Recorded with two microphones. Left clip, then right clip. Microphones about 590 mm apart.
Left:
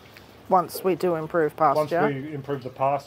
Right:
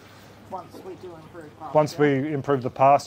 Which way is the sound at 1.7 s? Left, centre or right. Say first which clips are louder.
Right 3 dB; right.